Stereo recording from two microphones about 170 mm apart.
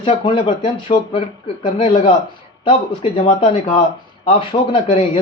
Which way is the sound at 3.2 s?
35° left (ahead or behind).